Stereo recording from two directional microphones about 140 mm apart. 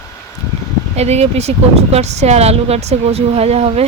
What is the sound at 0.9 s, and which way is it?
Speech, 50° right (ahead or behind).